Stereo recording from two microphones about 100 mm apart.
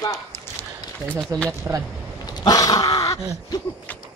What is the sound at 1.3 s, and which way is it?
Speech, 30° right (ahead or behind).